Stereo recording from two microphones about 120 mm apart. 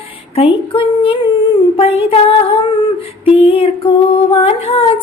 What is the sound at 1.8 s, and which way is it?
Child singing, 55° left (ahead or behind).